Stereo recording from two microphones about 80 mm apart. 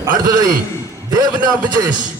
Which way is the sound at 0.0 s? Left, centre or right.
Right.